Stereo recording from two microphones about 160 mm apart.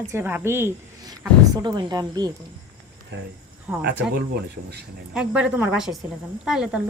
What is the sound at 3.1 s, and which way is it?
Speech, 90° right.